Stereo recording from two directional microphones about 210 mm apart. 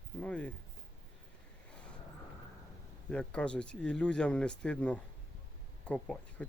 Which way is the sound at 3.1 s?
5° left (ahead or behind).